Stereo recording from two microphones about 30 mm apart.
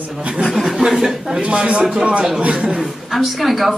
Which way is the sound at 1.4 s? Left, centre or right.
Right.